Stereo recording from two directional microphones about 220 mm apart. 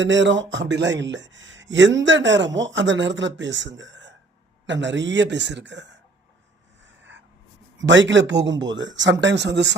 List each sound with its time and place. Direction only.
0.0 s a man's voice: 55° right (ahead or behind)
7.9 s a man's voice: 55° right (ahead or behind)